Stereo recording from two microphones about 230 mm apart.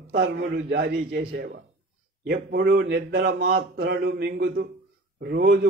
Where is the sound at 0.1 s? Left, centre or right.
Right.